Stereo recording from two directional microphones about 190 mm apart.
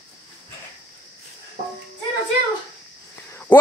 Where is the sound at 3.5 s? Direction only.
10° left (ahead or behind).